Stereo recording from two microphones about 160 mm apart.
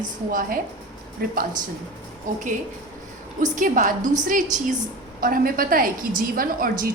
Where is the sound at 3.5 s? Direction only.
55° right (ahead or behind).